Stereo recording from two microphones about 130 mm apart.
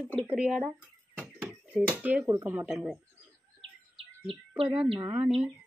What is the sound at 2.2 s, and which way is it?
Speech, 25° right (ahead or behind).